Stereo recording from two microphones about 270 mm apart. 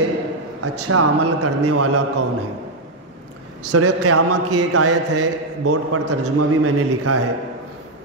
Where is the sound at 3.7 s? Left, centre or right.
Right.